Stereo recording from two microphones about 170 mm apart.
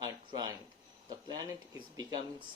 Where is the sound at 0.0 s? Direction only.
25° right (ahead or behind).